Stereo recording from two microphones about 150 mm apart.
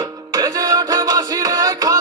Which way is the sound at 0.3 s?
25° right (ahead or behind).